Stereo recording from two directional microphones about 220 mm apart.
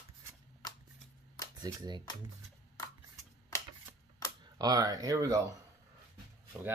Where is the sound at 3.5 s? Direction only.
10° left (ahead or behind).